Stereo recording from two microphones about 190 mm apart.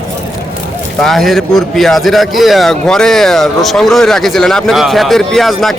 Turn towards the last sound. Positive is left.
turn(degrees=0)  # may be behind; listen again after turning